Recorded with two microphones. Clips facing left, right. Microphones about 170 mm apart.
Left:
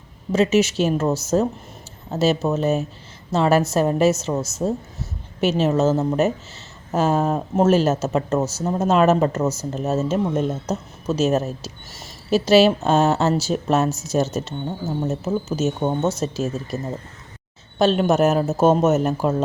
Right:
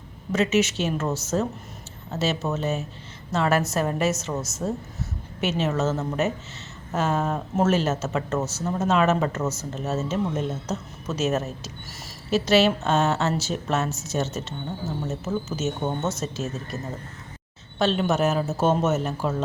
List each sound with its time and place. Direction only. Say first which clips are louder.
0.3 s a woman's voice: left 4 dB; 30° left (ahead or behind)
17.7 s speech: left 5 dB; 45° left (ahead or behind)